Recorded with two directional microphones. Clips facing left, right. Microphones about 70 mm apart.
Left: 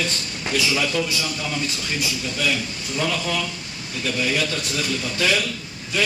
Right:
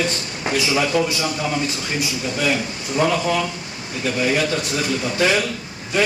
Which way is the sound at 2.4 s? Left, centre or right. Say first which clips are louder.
Right 3 dB; right.